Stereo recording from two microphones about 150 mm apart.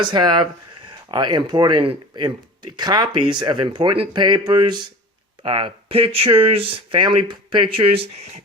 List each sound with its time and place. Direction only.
0.0 s speech: 30° right (ahead or behind)